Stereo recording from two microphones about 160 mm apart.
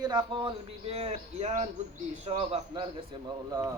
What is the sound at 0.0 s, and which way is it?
Speech, 30° right (ahead or behind).